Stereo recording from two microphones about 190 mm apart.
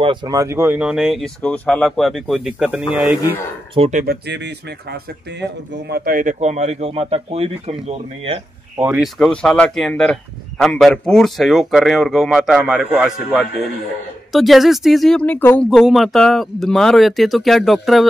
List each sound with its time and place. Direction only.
0.0 s speech: 25° right (ahead or behind); by 3.2 s centre (ahead or behind)
3.7 s speech: 30° right (ahead or behind)
4.0 s a man's voice: 60° right (ahead or behind); by 8.4 s 30° right (ahead or behind)
8.9 s speech: centre (ahead or behind)